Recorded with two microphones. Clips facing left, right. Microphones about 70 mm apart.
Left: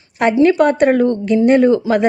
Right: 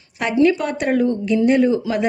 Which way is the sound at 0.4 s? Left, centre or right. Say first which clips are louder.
Left 7 dB; left.